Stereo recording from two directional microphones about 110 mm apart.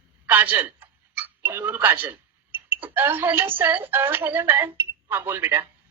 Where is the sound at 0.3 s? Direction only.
15° right (ahead or behind).